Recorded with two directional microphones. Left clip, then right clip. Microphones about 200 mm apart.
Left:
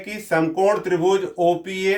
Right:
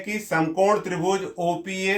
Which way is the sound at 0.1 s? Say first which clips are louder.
Left 3 dB; 40° left (ahead or behind).